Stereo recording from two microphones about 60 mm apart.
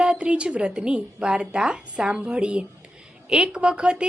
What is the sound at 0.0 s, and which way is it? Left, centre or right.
A woman's voice, centre.